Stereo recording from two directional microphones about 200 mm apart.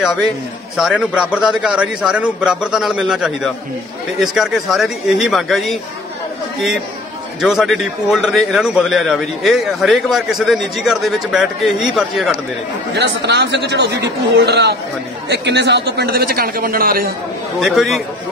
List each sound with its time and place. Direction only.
0.0 s a man's voice: centre (ahead or behind)
7.3 s a man's voice: centre (ahead or behind)
12.9 s a man's voice: 60° right (ahead or behind)
17.6 s a man's voice: centre (ahead or behind)